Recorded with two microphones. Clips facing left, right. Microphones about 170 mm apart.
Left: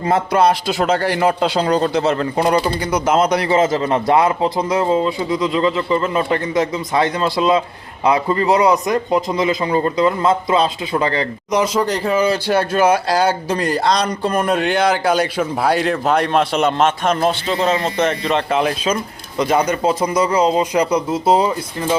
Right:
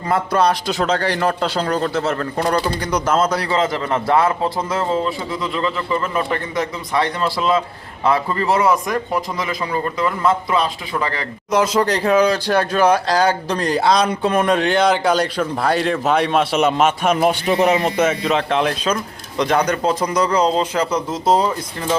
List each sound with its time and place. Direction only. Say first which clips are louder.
0.3 s a man's voice: left 2 dB; 10° left (ahead or behind)